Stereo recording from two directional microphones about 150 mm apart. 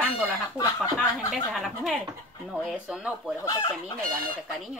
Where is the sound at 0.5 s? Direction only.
20° left (ahead or behind).